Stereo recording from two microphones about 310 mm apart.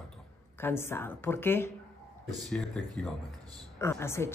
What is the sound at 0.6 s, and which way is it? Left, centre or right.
A man's voice, centre.